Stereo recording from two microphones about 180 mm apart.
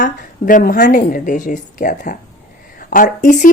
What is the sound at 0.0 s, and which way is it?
Speech, 50° left (ahead or behind).